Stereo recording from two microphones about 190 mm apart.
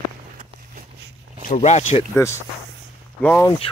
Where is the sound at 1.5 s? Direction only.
35° left (ahead or behind).